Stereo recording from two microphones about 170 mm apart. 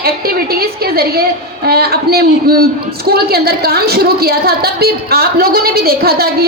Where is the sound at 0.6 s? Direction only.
65° right (ahead or behind).